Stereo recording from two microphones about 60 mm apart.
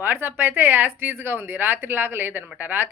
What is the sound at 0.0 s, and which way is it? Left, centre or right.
Speech, right.